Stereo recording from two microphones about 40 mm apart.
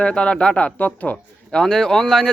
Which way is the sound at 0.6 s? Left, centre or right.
Left.